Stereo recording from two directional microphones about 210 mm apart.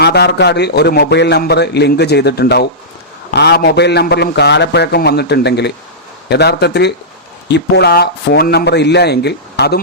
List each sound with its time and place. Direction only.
0.0 s a man's voice: 50° left (ahead or behind)